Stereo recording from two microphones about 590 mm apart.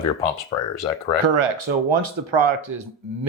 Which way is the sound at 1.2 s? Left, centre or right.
Right.